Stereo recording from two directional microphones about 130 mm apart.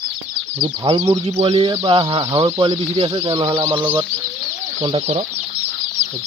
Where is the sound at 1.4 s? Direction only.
45° right (ahead or behind).